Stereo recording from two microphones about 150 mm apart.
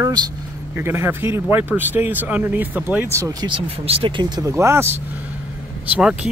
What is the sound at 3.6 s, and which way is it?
Speech, 40° right (ahead or behind).